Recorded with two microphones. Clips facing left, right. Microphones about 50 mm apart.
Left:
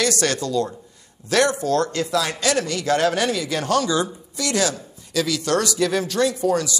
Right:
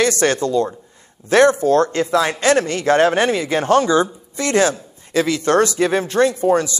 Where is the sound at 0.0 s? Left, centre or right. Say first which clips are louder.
Right 5 dB; right.